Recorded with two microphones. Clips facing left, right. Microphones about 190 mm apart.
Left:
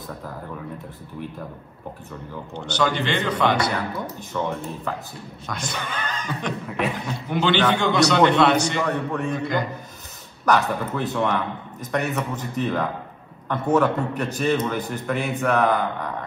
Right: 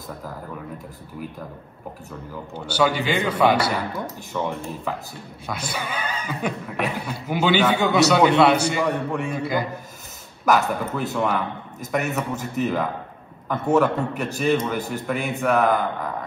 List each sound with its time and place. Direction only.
2.5 s speech: 5° right (ahead or behind)